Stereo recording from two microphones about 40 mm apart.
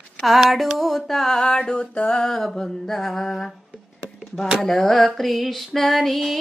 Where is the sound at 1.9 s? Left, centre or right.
Left.